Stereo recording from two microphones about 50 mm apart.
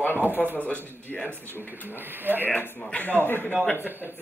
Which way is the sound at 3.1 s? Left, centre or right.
Left.